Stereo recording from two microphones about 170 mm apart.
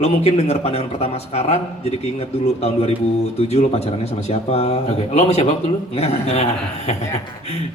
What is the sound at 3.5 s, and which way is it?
A man's voice, 35° left (ahead or behind).